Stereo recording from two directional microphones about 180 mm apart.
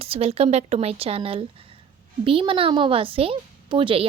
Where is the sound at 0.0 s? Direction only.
35° right (ahead or behind).